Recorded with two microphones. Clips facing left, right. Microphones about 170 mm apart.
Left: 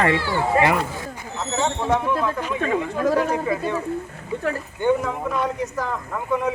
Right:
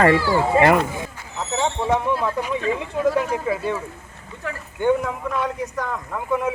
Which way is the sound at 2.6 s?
50° left (ahead or behind).